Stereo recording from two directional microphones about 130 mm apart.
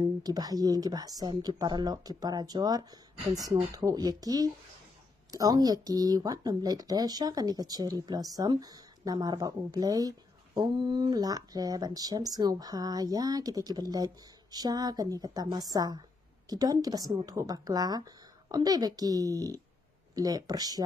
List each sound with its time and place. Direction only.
0.0 s speech: 30° right (ahead or behind)